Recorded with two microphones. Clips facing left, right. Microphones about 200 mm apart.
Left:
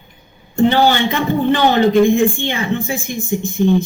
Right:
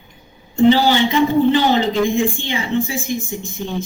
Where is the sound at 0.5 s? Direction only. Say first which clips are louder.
Right 1 dB; 55° left (ahead or behind).